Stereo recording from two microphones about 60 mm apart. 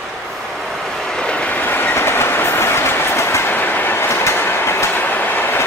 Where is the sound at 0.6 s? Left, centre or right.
Centre; by 1.9 s left.